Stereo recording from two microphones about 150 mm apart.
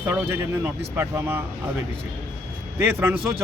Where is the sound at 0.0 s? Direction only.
15° right (ahead or behind).